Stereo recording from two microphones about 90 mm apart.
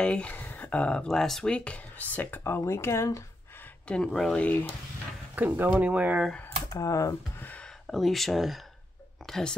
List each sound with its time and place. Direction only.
0.0 s speech: 10° left (ahead or behind); by 3.3 s 30° left (ahead or behind)
3.8 s speech: 10° left (ahead or behind)
5.3 s speech: 20° right (ahead or behind)
6.7 s speech: 40° left (ahead or behind)
7.3 s a sound: 20° left (ahead or behind)
7.8 s speech: centre (ahead or behind)